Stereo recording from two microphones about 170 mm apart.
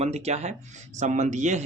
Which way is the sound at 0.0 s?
40° right (ahead or behind).